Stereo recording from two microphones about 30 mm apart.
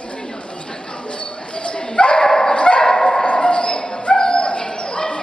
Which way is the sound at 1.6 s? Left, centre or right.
Left.